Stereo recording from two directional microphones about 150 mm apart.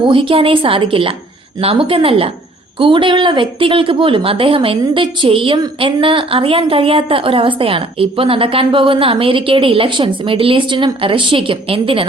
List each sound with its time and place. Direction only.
0.1 s a woman's voice: 35° right (ahead or behind)